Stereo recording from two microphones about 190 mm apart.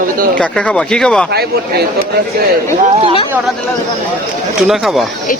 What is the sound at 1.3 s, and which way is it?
Speech, 55° right (ahead or behind).